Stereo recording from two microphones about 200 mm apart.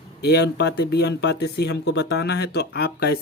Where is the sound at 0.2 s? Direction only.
55° left (ahead or behind).